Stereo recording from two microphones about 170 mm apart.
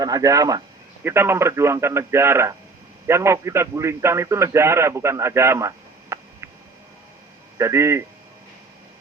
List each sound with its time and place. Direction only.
0.0 s a man's voice: 20° right (ahead or behind)
7.6 s speech: 15° right (ahead or behind)